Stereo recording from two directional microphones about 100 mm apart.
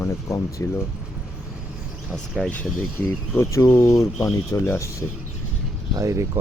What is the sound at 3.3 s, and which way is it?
Speech, 30° left (ahead or behind).